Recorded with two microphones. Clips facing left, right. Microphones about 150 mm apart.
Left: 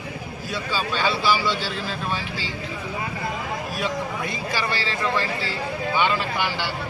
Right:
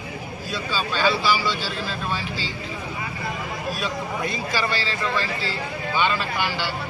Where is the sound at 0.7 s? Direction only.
15° left (ahead or behind).